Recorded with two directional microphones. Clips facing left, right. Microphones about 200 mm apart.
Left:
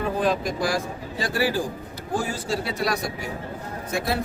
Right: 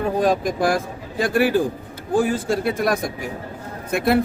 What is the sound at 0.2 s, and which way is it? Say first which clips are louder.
Speech: right 5 dB; 50° right (ahead or behind).